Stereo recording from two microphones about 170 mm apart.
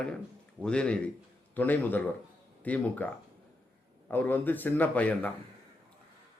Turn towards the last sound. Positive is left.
turn(degrees=10)  # may be behind; listen again after turning